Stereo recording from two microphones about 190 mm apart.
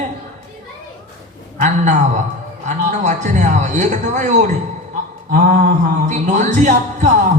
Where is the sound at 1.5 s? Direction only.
40° right (ahead or behind).